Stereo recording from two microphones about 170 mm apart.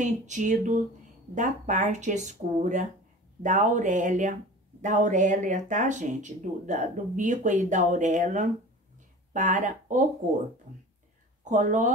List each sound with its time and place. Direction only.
0.0 s speech: 45° right (ahead or behind)
11.4 s speech: 45° right (ahead or behind)